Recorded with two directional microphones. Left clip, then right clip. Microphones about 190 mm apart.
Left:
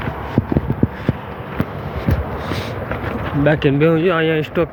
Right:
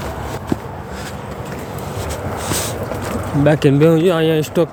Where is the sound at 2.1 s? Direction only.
45° right (ahead or behind).